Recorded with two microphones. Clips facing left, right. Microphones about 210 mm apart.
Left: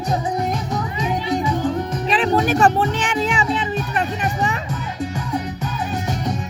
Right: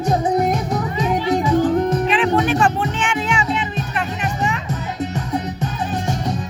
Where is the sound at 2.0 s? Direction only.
35° left (ahead or behind).